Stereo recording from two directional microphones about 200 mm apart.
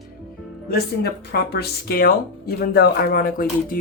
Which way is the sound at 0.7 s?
50° left (ahead or behind).